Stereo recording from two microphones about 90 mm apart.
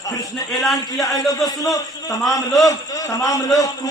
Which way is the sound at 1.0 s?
40° left (ahead or behind).